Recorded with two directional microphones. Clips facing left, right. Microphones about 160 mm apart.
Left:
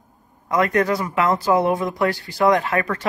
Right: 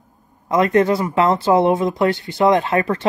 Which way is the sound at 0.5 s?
25° right (ahead or behind).